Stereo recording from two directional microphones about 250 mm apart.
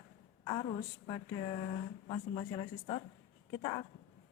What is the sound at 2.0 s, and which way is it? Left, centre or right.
Speech, left.